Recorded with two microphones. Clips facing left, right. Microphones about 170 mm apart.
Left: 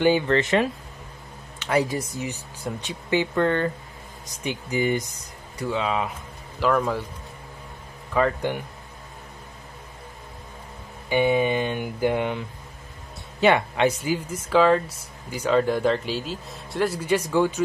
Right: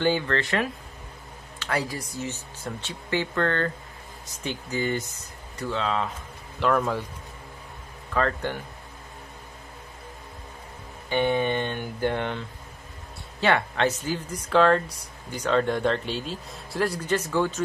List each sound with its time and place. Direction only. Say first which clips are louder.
0.0 s speech: left 5 dB; 15° left (ahead or behind)
6.6 s speech: left 1 dB; centre (ahead or behind)
8.1 s speech: left 3 dB; 10° left (ahead or behind)
11.1 s speech: left 3 dB; 10° left (ahead or behind)